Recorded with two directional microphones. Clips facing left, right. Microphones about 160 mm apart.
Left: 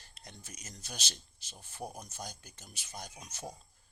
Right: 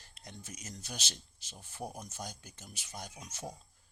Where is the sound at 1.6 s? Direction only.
Centre (ahead or behind).